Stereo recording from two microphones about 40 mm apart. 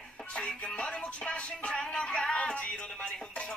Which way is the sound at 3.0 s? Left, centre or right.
Left.